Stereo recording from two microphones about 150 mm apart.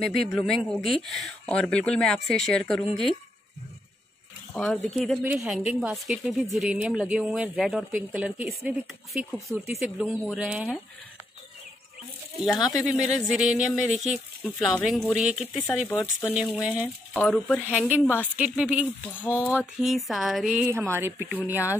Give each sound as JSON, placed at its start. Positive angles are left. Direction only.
{"t": 0.0, "sound": "speech", "side_deg": 5}
{"t": 4.6, "sound": "speech", "side_deg": 5}
{"t": 5.2, "sound": "speech", "side_deg": -10}
{"t": 12.5, "sound": "speech", "side_deg": 25}
{"t": 12.8, "sound": "speech", "side_deg": -5}
{"t": 15.9, "sound": "speech", "side_deg": 15}
{"t": 16.6, "sound": "speech", "side_deg": -10}
{"t": 17.1, "sound": "speech", "side_deg": 10}
{"t": 17.6, "sound": "speech", "side_deg": -10}
{"t": 19.1, "sound": "speech", "side_deg": 10}
{"t": 19.5, "sound": "speech", "side_deg": -5}